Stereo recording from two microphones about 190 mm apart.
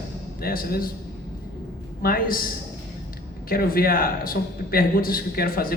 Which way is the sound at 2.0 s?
50° left (ahead or behind).